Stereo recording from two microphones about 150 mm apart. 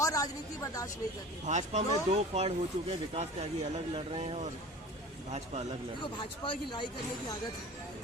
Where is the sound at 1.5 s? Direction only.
55° right (ahead or behind).